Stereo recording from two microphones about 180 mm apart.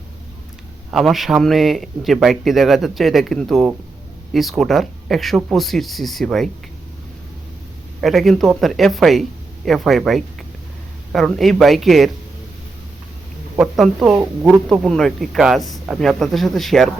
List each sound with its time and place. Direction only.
0.9 s speech: centre (ahead or behind)
8.0 s speech: centre (ahead or behind)
13.6 s speech: centre (ahead or behind)